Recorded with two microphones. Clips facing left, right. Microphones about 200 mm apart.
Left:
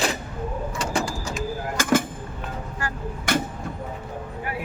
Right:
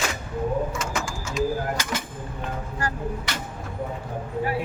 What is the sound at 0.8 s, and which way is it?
Bird, 35° left (ahead or behind).